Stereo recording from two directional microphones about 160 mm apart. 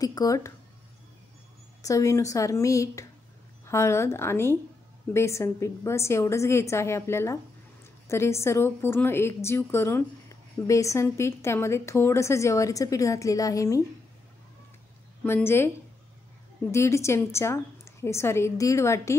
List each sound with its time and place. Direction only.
0.0 s a woman's voice: 20° left (ahead or behind)
1.8 s a woman's voice: 20° left (ahead or behind)
15.2 s a woman's voice: 15° left (ahead or behind)
16.7 s a woman's voice: 15° left (ahead or behind)